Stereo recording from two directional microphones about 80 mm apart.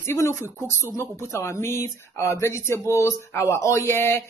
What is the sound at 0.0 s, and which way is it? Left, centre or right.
Speech, left.